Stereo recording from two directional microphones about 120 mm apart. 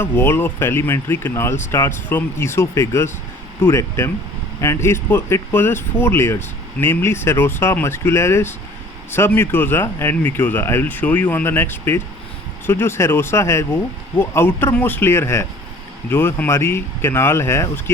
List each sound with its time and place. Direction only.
0.0 s speech: 20° left (ahead or behind)